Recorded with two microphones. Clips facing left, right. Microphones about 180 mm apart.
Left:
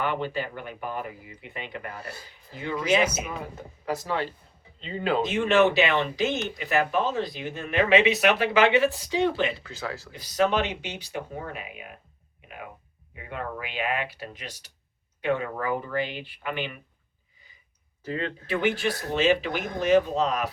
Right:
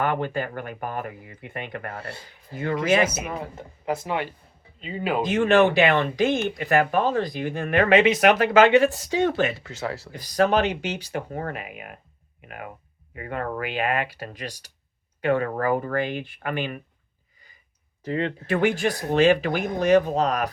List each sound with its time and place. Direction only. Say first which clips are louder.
0.0 s speech: right 3 dB; 50° right (ahead or behind)
3.8 s speech: right 2 dB; 20° right (ahead or behind)
5.2 s speech: right 3 dB; 45° right (ahead or behind)
11.3 s speech: right 5 dB; 55° right (ahead or behind)
13.1 s speech: right 5 dB; 55° right (ahead or behind)
15.2 s speech: right 4 dB; 45° right (ahead or behind)
18.0 s speech: right 5 dB; 30° right (ahead or behind)
18.4 s speech: right 3 dB; 45° right (ahead or behind)